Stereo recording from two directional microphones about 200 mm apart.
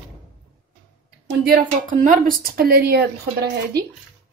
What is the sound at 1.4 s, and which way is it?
Speech, 45° right (ahead or behind).